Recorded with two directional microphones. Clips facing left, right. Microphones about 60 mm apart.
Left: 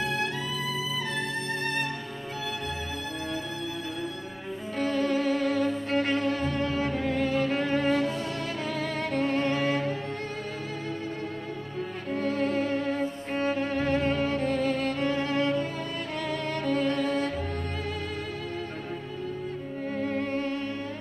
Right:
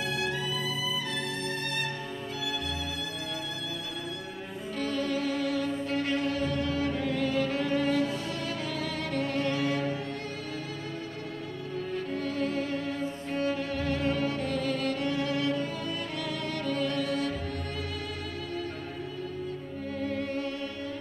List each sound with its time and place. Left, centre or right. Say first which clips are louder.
4.7 s music: left 4 dB; left
9.1 s music: left 3 dB; left
12.2 s music: left 6 dB; left
20.0 s music: left 3 dB; left